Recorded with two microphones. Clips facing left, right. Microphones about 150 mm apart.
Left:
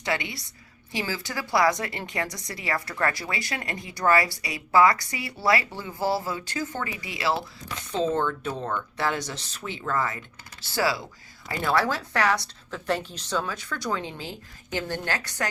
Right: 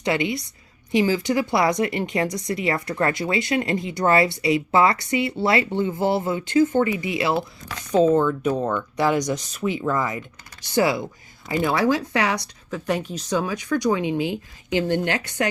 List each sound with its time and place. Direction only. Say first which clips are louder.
0.0 s a woman's voice: right 7 dB; 20° right (ahead or behind)
8.1 s a woman's voice: right 7 dB; 10° right (ahead or behind)